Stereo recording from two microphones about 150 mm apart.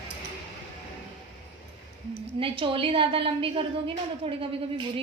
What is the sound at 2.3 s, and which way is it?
A woman's voice, 35° right (ahead or behind).